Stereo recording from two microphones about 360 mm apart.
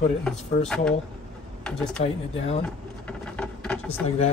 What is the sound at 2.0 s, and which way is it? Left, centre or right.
Speech, centre.